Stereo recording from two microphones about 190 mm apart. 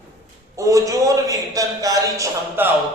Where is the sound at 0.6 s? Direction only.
15° right (ahead or behind).